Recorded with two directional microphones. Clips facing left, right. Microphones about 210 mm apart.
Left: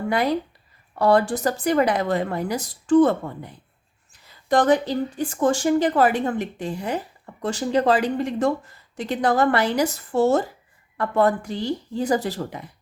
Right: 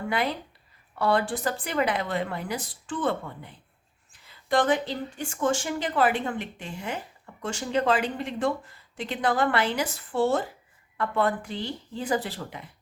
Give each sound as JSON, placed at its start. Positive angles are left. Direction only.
{"t": 0.1, "sound": "speech", "side_deg": 40}